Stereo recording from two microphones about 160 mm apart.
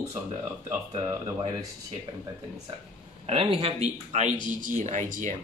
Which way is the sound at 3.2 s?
35° right (ahead or behind).